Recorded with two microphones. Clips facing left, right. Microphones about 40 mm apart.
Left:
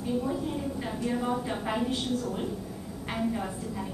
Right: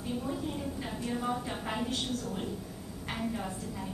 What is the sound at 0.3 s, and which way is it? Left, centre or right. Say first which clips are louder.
A woman's voice: left 4 dB; centre.